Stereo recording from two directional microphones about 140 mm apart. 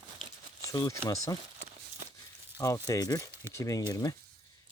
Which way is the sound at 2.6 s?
25° left (ahead or behind).